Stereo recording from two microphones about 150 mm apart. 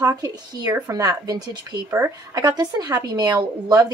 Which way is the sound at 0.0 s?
25° right (ahead or behind).